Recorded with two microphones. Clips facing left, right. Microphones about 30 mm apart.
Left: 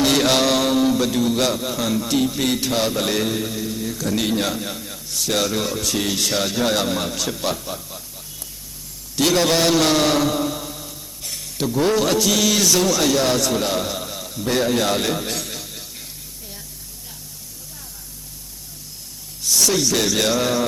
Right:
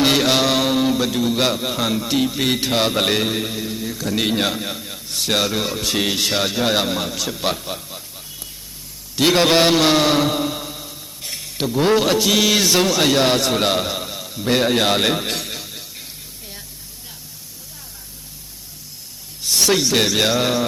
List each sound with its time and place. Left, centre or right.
0.2 s a man's voice: centre
7.4 s a sound: right
9.1 s a man's voice: right
13.7 s a sound: right
19.5 s speech: right
20.1 s a man's voice: right